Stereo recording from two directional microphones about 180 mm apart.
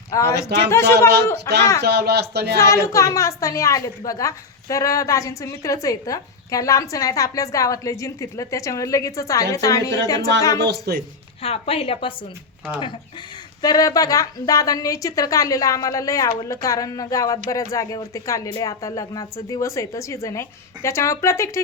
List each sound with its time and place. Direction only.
0.1 s a woman's voice: 20° left (ahead or behind)
1.8 s speech: 65° right (ahead or behind)
2.6 s a woman's voice: 15° left (ahead or behind)
10.6 s speech: 65° right (ahead or behind)
11.4 s a woman's voice: 35° left (ahead or behind)
13.6 s a woman's voice: 20° left (ahead or behind)